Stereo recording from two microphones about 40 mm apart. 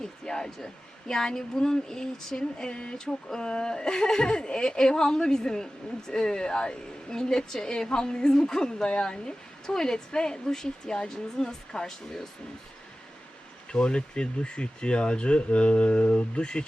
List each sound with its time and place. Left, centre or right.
0.0 s speech: centre
13.7 s speech: left